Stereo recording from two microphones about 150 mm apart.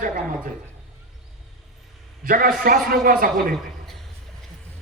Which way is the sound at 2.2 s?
70° right (ahead or behind).